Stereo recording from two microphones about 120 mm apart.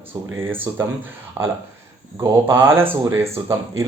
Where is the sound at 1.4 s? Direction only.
25° right (ahead or behind).